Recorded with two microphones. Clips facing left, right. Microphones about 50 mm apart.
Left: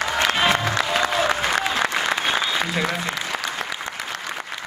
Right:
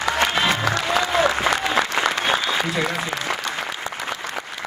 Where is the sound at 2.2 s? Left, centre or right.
Centre.